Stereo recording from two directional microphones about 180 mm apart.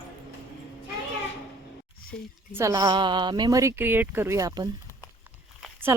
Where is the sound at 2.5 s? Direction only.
20° right (ahead or behind).